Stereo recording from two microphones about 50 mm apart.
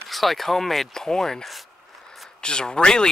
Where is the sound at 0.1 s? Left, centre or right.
Centre.